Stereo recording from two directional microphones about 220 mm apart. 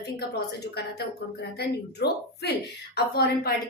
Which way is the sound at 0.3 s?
50° left (ahead or behind).